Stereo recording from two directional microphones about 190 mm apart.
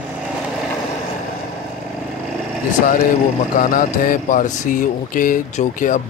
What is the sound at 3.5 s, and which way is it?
Speech, 45° left (ahead or behind).